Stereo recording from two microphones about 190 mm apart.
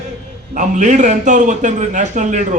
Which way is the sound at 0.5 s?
40° right (ahead or behind).